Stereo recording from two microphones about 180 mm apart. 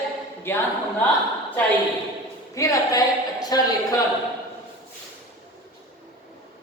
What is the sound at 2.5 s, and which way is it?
Speech, 20° left (ahead or behind).